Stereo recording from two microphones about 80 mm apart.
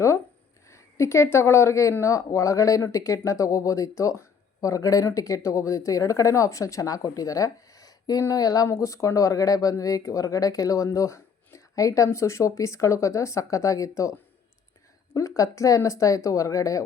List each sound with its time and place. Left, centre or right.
0.7 s speech: left
8.7 s speech: left
15.4 s speech: left